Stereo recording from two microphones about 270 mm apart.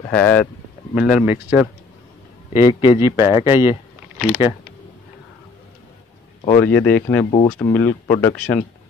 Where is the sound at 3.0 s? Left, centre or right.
Centre.